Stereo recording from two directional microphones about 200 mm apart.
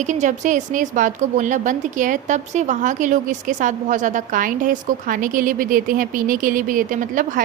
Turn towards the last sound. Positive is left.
turn(degrees=-40)  # may be behind; listen again after turning